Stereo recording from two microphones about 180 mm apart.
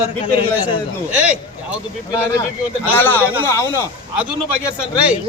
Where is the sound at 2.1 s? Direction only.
20° left (ahead or behind).